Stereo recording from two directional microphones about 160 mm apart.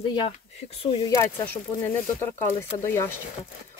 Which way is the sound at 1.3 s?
15° left (ahead or behind).